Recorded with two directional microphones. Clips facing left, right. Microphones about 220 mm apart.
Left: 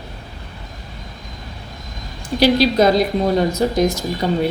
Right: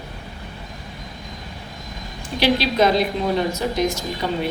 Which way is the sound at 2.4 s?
40° left (ahead or behind).